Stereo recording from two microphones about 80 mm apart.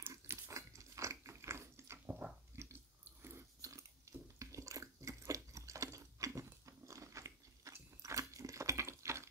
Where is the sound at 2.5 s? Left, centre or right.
Right.